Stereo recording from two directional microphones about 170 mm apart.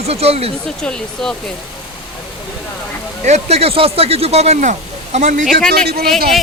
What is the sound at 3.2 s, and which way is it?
Speech, 40° right (ahead or behind).